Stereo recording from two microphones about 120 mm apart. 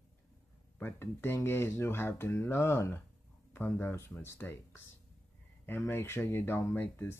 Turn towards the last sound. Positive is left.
turn(degrees=20)  # may be behind; listen again after turning